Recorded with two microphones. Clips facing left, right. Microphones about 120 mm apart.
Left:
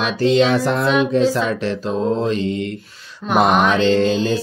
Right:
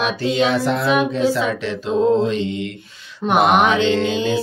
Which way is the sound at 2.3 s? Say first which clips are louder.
Left 2 dB; 40° left (ahead or behind).